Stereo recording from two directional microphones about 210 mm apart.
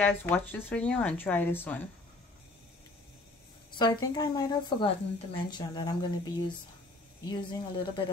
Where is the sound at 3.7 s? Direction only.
20° left (ahead or behind).